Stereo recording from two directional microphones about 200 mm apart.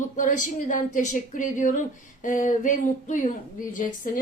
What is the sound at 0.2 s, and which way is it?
A woman's voice, 40° left (ahead or behind).